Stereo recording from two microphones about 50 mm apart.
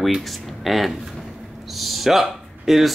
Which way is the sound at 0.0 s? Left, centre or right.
Centre.